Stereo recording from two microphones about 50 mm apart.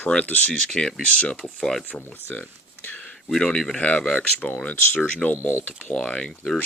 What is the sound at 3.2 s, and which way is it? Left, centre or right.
Speech, centre.